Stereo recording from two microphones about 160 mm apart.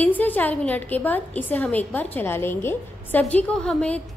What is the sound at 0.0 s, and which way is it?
A woman's voice, 10° left (ahead or behind).